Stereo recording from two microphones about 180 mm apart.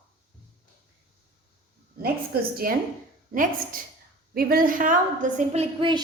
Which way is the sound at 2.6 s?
55° right (ahead or behind).